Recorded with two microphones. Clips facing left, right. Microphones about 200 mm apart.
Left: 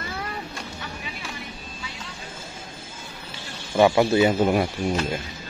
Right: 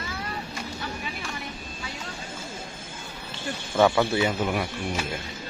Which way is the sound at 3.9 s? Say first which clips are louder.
Left 5 dB; 25° left (ahead or behind).